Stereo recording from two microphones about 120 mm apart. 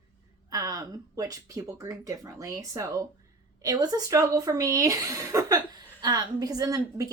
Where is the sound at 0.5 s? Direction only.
30° right (ahead or behind).